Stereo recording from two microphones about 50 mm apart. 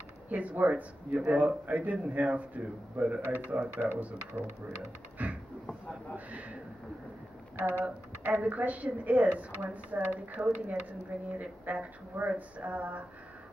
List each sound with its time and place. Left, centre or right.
0.3 s speech: right
5.2 s a sound: right
7.6 s speech: right